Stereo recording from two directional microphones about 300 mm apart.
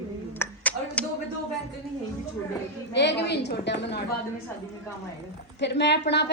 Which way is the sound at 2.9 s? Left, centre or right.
Left.